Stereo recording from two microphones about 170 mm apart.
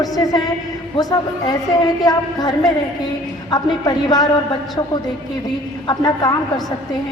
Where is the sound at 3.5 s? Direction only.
25° left (ahead or behind).